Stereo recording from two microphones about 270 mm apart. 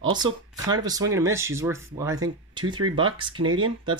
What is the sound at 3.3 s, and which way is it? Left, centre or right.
Speech, right.